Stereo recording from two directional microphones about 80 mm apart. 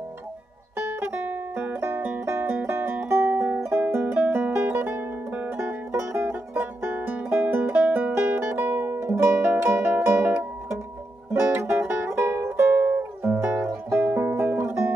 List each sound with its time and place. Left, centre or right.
0.7 s music: right